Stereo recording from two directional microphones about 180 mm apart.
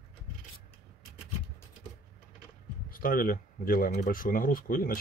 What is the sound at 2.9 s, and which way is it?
Speech, 50° left (ahead or behind).